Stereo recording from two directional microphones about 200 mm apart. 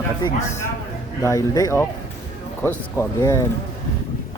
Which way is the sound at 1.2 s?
15° left (ahead or behind).